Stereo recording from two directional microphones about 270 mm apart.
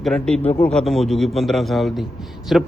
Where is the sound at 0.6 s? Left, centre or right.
Centre.